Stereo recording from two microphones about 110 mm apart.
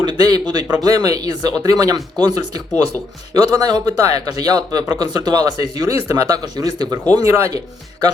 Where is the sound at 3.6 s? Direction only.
35° right (ahead or behind).